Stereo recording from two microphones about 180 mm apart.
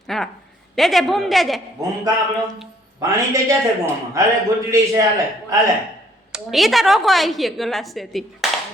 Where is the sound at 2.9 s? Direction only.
15° right (ahead or behind).